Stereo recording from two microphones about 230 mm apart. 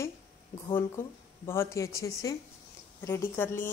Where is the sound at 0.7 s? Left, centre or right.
Centre.